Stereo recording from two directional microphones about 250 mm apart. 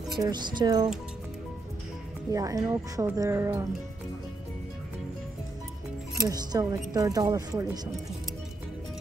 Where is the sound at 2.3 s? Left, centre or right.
Centre.